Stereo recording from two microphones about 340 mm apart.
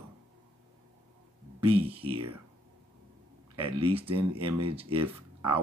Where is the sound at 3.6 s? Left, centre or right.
Centre.